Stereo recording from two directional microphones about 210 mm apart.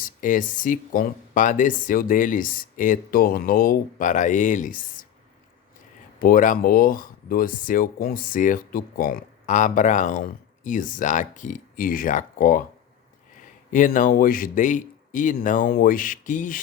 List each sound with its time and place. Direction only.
0.0 s speech: 40° left (ahead or behind)
6.1 s speech: 40° left (ahead or behind)